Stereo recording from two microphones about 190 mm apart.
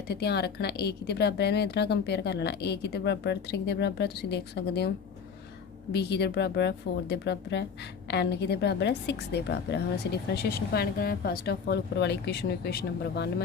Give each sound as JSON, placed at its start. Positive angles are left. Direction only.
{"t": 0.1, "sound": "a woman's voice", "side_deg": 55}
{"t": 5.9, "sound": "a woman's voice", "side_deg": 60}